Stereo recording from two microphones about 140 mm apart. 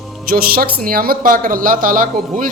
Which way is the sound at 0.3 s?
90° right.